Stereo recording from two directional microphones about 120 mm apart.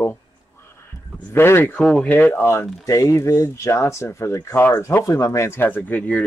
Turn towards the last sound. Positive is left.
turn(degrees=15)  # may be behind; listen again after turning